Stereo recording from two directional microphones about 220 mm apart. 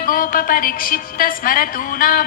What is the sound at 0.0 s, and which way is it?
A woman's voice, 40° left (ahead or behind).